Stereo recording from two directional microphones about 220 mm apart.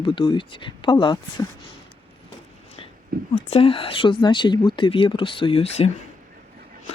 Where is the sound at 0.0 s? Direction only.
20° left (ahead or behind).